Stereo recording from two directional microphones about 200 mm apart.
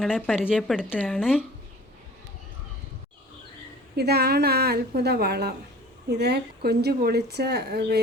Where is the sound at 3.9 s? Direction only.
55° right (ahead or behind).